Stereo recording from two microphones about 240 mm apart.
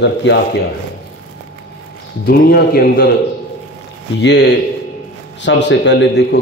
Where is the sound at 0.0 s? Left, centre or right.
Left.